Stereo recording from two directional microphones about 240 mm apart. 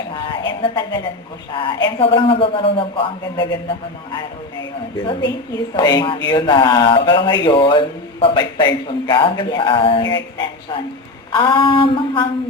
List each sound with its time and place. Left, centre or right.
0.1 s a sound: centre
1.5 s speech: left
5.7 s speech: centre